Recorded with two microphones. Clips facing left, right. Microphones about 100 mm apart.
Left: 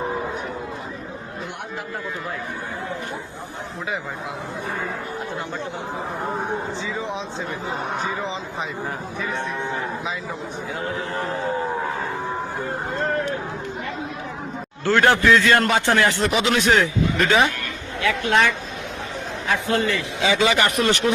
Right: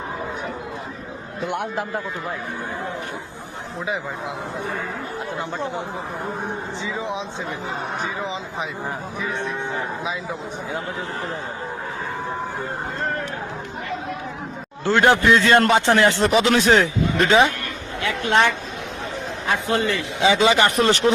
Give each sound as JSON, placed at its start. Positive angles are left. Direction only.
{"t": 14.8, "sound": "a man's voice", "side_deg": -20}